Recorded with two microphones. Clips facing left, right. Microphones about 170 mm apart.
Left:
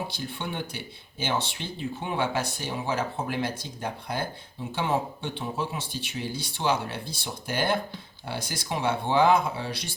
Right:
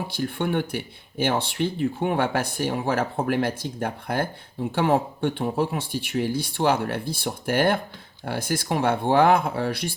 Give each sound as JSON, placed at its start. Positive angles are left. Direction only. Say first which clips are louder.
{"t": 0.2, "sound": "speech", "louder": "right 9 dB", "side_deg": -55}